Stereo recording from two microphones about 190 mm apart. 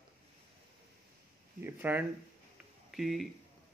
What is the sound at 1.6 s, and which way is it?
A man's voice, 10° right (ahead or behind).